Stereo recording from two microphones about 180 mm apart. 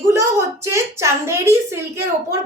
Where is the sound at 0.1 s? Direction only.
15° right (ahead or behind).